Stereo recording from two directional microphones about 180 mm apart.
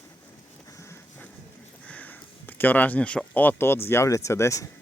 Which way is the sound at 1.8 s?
10° left (ahead or behind).